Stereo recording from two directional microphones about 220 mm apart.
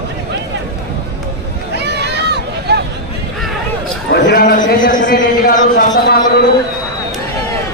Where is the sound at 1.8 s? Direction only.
50° right (ahead or behind).